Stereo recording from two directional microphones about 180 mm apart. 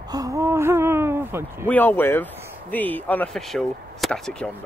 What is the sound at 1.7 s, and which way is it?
Speech, 10° left (ahead or behind).